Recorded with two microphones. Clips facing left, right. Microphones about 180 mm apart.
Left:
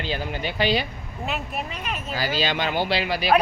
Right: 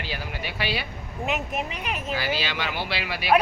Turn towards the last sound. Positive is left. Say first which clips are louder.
# left 6 dB
turn(degrees=30)  # may be behind; listen again after turning